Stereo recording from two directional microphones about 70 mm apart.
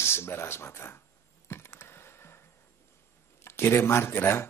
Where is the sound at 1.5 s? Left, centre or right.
Left.